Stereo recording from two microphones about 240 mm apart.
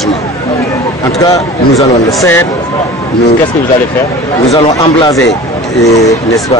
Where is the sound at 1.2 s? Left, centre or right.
Centre.